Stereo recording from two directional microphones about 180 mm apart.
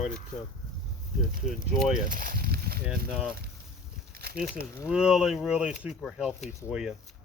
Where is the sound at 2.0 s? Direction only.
50° right (ahead or behind).